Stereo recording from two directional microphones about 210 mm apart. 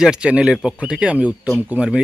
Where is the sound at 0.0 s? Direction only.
5° right (ahead or behind).